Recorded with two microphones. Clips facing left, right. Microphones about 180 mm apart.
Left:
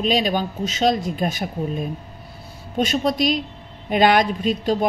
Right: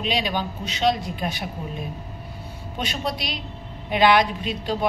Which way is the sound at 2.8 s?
45° left (ahead or behind).